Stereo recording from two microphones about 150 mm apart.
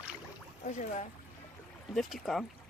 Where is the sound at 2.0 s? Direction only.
Centre (ahead or behind).